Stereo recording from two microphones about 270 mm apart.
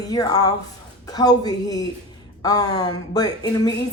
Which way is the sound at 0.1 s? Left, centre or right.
Centre.